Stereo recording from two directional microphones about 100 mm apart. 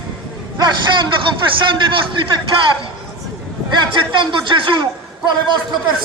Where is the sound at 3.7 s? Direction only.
55° right (ahead or behind).